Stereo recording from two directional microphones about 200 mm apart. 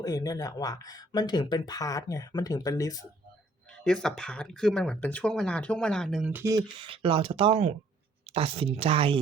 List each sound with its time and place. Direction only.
0.0 s speech: 20° left (ahead or behind)
3.8 s speech: 5° left (ahead or behind)
6.3 s speech: 15° right (ahead or behind)
6.7 s speech: 25° right (ahead or behind)